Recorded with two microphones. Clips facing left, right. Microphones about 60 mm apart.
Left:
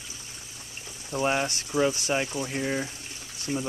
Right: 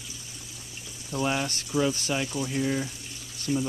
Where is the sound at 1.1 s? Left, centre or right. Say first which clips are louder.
Left 2 dB; left.